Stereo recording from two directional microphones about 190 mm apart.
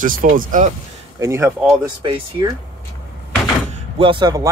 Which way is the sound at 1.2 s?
15° right (ahead or behind).